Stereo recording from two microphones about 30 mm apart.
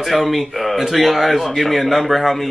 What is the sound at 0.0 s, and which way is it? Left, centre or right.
Speech, centre.